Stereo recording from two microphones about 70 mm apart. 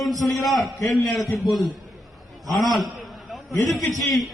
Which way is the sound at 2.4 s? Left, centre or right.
Centre.